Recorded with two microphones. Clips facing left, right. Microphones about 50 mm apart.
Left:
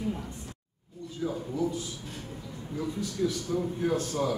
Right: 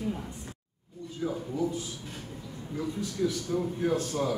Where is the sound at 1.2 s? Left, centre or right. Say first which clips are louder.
Even; centre.